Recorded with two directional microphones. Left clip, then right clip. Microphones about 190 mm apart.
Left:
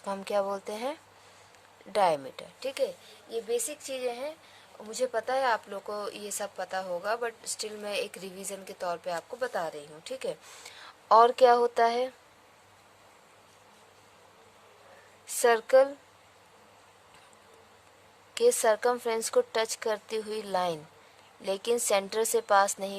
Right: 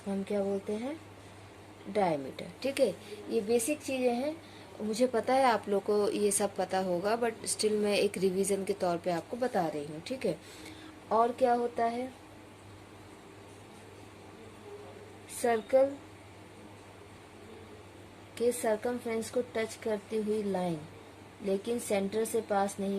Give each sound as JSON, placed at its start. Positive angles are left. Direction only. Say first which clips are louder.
{"t": 0.1, "sound": "a woman's voice", "louder": "left 3 dB", "side_deg": 55}
{"t": 2.6, "sound": "speech", "louder": "right 2 dB", "side_deg": 30}
{"t": 4.9, "sound": "speech", "louder": "right 1 dB", "side_deg": 30}
{"t": 11.1, "sound": "a woman's voice", "louder": "left 7 dB", "side_deg": 65}
{"t": 15.4, "sound": "a woman's voice", "louder": "left 5 dB", "side_deg": 60}
{"t": 18.3, "sound": "a woman's voice", "louder": "left 6 dB", "side_deg": 60}